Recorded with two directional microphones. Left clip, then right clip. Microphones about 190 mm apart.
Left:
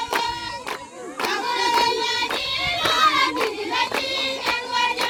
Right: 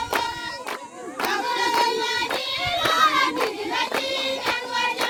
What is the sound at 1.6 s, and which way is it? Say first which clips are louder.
Music: left 3 dB; 10° left (ahead or behind).